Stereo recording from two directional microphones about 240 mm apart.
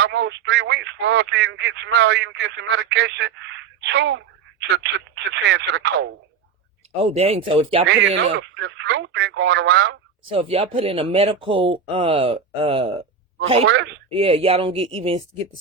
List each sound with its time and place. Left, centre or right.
0.0 s speech: right
6.9 s speech: right
7.9 s speech: right
10.2 s speech: right
13.7 s speech: right
14.1 s speech: right